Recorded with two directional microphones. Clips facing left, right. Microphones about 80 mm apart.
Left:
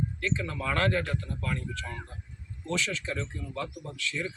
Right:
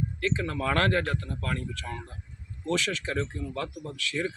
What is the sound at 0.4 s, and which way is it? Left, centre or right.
Speech, right.